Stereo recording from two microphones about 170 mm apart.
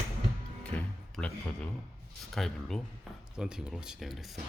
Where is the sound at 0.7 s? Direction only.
5° left (ahead or behind).